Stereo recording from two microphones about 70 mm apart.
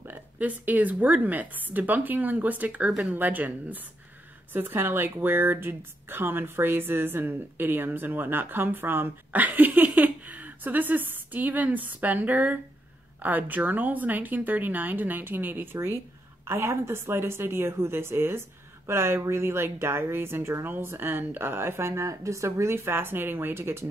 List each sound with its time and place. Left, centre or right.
0.0 s speech: right
2.9 s speech: centre
3.2 s a woman's voice: right